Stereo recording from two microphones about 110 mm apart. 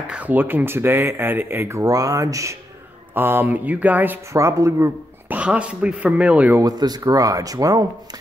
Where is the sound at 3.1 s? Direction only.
20° right (ahead or behind).